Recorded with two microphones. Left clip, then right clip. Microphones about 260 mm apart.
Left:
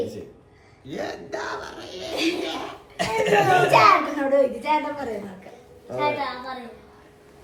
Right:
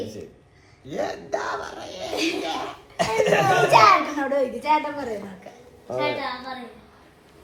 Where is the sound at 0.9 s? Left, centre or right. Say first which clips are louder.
Right 4 dB; centre.